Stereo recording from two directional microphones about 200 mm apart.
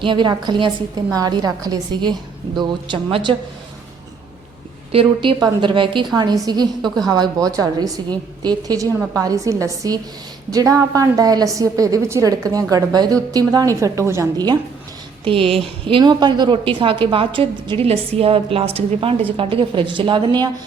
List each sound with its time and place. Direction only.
0.0 s a woman's voice: 25° right (ahead or behind)
4.9 s a woman's voice: 25° right (ahead or behind)